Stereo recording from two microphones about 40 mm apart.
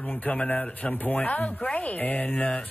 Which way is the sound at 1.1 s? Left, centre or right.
Left.